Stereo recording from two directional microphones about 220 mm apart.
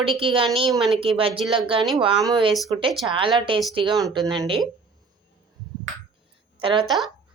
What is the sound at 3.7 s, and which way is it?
Speech, 20° right (ahead or behind).